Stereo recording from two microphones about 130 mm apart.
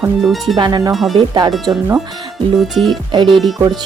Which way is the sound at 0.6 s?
30° right (ahead or behind).